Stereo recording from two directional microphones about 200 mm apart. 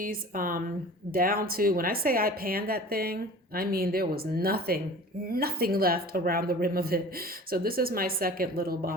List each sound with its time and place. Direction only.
0.0 s a woman's voice: 45° right (ahead or behind)